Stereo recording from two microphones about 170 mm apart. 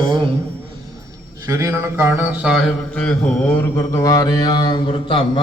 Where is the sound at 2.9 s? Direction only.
5° left (ahead or behind); by 5.4 s 30° left (ahead or behind).